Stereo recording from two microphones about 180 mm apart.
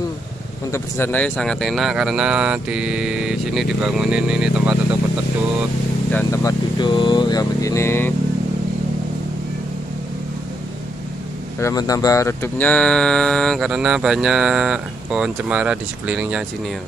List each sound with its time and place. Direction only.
0.7 s speech: 15° left (ahead or behind); by 4.7 s 5° right (ahead or behind)
6.1 s speech: 20° left (ahead or behind)
11.6 s speech: 20° left (ahead or behind); by 16.4 s 5° right (ahead or behind)